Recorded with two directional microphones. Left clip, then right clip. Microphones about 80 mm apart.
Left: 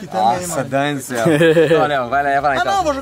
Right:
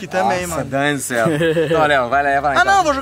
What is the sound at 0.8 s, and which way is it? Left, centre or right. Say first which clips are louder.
Speech: right 2 dB; centre.